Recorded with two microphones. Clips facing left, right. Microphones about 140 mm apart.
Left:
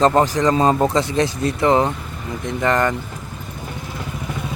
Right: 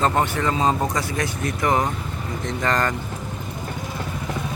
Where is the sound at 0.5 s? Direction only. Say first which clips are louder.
Left 4 dB; 50° left (ahead or behind).